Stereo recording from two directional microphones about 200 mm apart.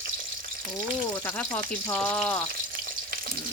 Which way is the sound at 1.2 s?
10° left (ahead or behind).